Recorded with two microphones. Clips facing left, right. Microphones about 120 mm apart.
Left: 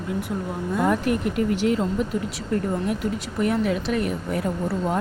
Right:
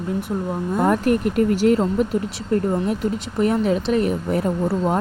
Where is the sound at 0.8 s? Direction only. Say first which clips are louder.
Right 4 dB; 45° right (ahead or behind).